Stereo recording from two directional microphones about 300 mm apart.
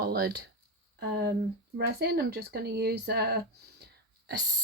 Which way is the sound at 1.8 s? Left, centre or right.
Right.